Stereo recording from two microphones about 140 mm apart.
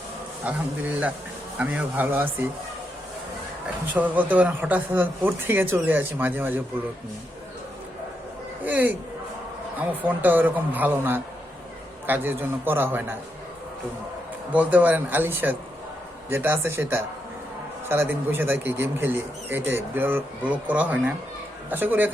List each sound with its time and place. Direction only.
0.4 s speech: 10° right (ahead or behind)
3.9 s speech: 10° right (ahead or behind)
8.6 s speech: 10° right (ahead or behind)
14.5 s speech: 10° right (ahead or behind)